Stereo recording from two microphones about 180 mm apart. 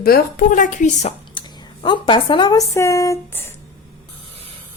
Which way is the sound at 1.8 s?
25° left (ahead or behind).